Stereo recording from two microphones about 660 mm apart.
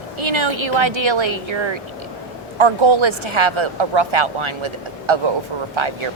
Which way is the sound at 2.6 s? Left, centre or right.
Right.